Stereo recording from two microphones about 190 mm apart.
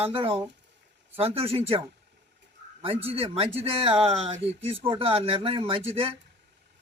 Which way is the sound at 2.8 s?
30° right (ahead or behind).